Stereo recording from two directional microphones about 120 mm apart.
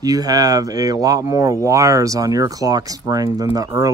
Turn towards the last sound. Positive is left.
turn(degrees=-30)  # may be behind; listen again after turning